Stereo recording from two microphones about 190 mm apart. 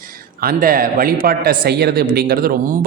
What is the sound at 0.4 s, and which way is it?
A man's voice, 50° right (ahead or behind).